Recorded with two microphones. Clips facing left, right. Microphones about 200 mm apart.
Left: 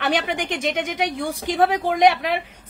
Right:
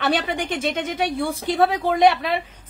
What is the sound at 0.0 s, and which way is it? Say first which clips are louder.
A woman's voice: even; 15° left (ahead or behind).